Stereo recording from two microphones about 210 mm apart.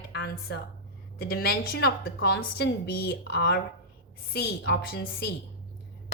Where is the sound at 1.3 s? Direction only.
50° left (ahead or behind).